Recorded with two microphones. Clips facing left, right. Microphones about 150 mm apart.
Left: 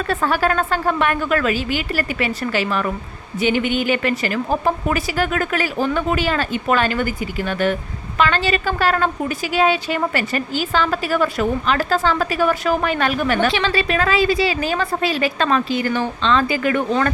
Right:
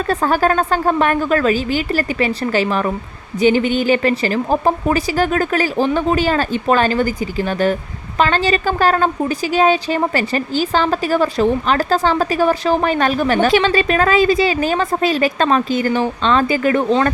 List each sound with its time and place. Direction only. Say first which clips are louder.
0.1 s speech: right 3 dB; 40° right (ahead or behind)